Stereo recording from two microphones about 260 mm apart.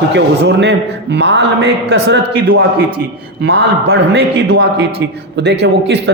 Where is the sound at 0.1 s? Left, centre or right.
Right.